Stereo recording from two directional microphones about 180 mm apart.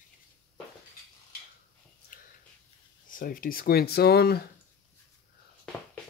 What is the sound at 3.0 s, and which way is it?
Speech, 50° left (ahead or behind).